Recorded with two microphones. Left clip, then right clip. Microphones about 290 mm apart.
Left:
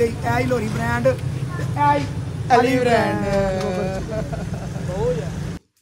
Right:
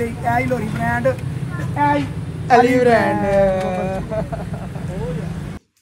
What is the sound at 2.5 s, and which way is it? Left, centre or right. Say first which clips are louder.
A woman's voice: right 3 dB; right.